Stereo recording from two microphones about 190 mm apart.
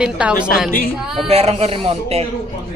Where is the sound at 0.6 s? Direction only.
50° left (ahead or behind).